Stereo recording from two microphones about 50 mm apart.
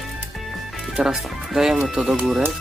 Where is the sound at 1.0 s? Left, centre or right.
Centre.